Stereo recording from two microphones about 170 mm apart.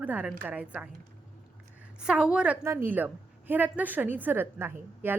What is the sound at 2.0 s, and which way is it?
A woman's voice, 5° right (ahead or behind).